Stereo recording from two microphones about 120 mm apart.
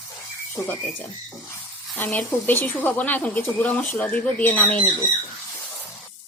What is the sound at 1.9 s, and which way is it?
Speech, 15° left (ahead or behind).